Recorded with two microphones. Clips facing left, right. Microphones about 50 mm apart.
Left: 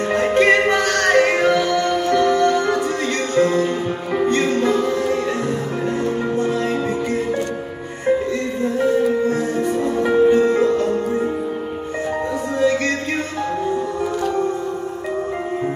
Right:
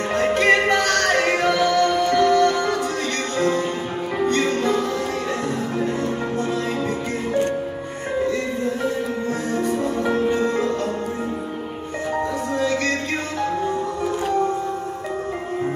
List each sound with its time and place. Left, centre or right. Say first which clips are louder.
0.1 s music: left 1 dB; centre
0.4 s music: left 3 dB; centre
9.8 s music: left 5 dB; centre
10.3 s music: left 6 dB; left
12.6 s music: left 6 dB; centre